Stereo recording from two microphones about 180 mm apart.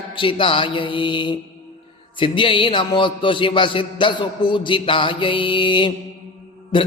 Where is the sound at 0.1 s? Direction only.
25° left (ahead or behind).